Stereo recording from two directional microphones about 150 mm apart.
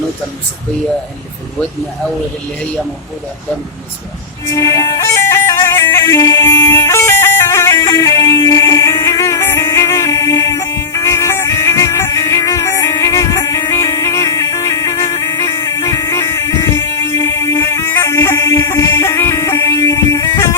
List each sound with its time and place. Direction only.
4.4 s music: 25° left (ahead or behind)